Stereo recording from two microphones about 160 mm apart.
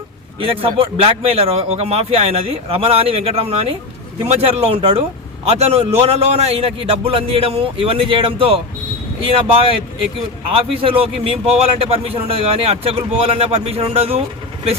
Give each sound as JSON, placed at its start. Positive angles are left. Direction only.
{"t": 0.3, "sound": "a man's voice", "side_deg": -35}